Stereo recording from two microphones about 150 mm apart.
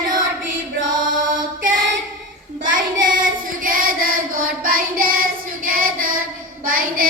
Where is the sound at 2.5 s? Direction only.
65° right (ahead or behind).